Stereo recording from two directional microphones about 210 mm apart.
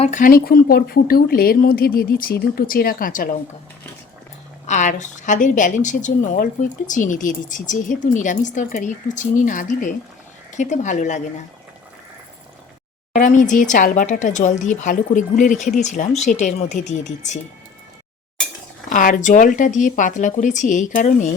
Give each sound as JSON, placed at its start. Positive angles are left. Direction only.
{"t": 0.0, "sound": "a woman's voice", "side_deg": 35}
{"t": 4.6, "sound": "a woman's voice", "side_deg": 35}
{"t": 13.1, "sound": "a woman's voice", "side_deg": 35}
{"t": 18.9, "sound": "a woman's voice", "side_deg": 40}